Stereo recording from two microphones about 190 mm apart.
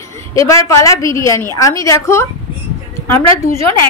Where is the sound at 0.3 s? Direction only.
15° left (ahead or behind).